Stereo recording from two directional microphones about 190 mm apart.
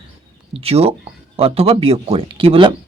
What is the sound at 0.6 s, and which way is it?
Speech, 30° right (ahead or behind).